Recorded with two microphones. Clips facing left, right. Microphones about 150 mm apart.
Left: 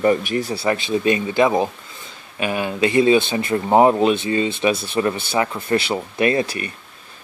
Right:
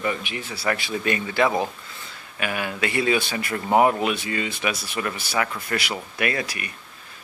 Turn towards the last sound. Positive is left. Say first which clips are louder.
# left 8 dB
turn(degrees=30)  # may be behind; listen again after turning